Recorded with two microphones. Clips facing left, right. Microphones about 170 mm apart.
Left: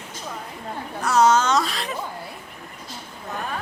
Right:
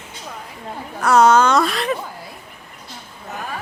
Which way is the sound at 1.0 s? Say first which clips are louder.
Right 5 dB; 60° right (ahead or behind).